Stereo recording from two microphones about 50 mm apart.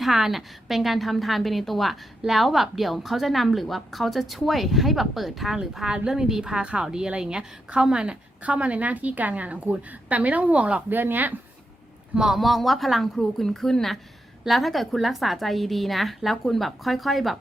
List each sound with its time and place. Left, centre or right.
0.0 s a woman's voice: centre; by 10.8 s right
10.8 s a woman's voice: right
12.1 s a woman's voice: centre
12.4 s a woman's voice: centre